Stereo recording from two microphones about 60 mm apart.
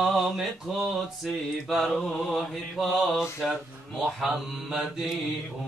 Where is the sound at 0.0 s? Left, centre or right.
Centre.